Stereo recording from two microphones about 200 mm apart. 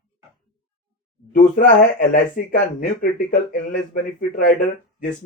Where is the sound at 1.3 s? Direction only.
40° left (ahead or behind).